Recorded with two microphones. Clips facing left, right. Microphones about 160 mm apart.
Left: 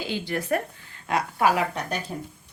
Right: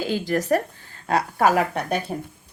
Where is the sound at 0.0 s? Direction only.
45° right (ahead or behind); by 2.1 s 60° right (ahead or behind).